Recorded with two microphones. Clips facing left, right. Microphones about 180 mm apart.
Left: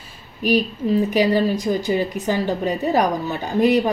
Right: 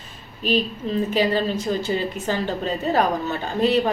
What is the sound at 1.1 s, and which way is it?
A woman's voice, 15° left (ahead or behind).